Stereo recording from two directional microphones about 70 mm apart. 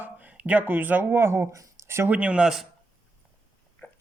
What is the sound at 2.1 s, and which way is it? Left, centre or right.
Speech, centre.